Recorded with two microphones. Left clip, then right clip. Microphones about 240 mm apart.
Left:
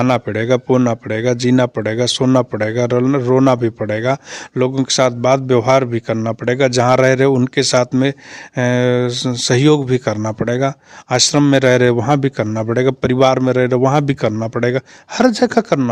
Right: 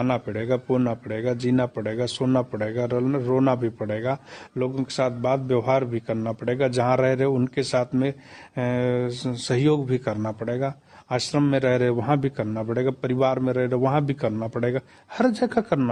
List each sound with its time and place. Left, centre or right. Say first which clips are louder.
0.0 s a man's voice: left 10 dB; left